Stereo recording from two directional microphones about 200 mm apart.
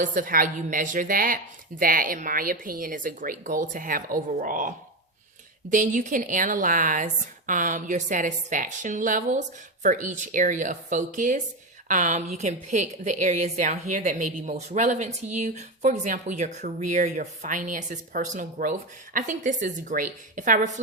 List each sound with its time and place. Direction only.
0.0 s a woman's voice: 40° right (ahead or behind)
5.7 s a woman's voice: 40° right (ahead or behind)